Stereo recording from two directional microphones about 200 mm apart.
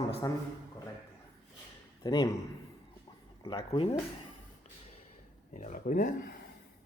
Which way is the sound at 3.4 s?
25° left (ahead or behind).